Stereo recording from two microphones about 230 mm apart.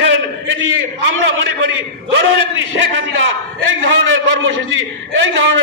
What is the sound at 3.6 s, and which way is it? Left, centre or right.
A man's voice, right.